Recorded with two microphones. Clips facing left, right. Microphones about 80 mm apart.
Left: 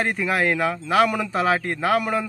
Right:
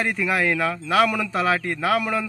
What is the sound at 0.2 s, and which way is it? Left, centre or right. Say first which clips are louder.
A man's voice: even; centre.